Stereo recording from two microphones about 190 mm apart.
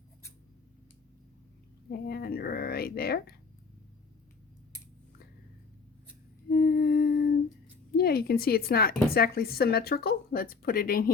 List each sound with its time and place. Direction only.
1.9 s a woman's voice: 55° left (ahead or behind)
6.5 s humming: 55° left (ahead or behind)
7.9 s a woman's voice: 55° left (ahead or behind)